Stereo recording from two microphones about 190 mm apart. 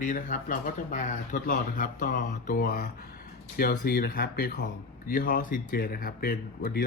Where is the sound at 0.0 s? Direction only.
45° left (ahead or behind).